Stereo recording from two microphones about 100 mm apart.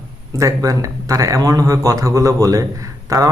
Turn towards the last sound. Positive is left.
turn(degrees=-35)  # may be behind; listen again after turning